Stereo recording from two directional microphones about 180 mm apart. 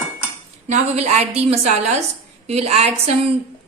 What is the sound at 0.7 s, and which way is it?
A woman's voice, 40° right (ahead or behind).